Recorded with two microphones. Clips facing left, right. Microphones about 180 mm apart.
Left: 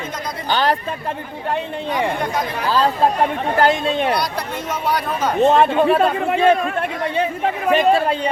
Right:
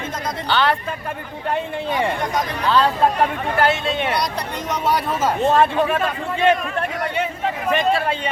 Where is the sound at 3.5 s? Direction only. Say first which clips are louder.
Left 2 dB; 40° left (ahead or behind).